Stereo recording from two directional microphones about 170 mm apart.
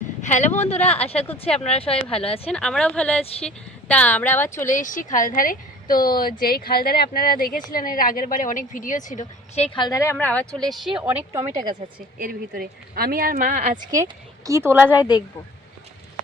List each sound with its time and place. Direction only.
0.2 s speech: 45° left (ahead or behind)
2.5 s speech: 5° left (ahead or behind)
4.7 s a woman's voice: 50° left (ahead or behind)
9.7 s speech: 20° left (ahead or behind); by 11.4 s 10° right (ahead or behind)
11.6 s a woman's voice: 25° right (ahead or behind)
12.2 s a woman's voice: 60° right (ahead or behind)
13.9 s speech: 20° right (ahead or behind)